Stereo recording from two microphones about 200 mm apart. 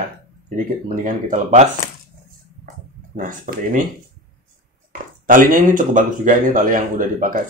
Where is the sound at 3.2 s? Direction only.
45° right (ahead or behind).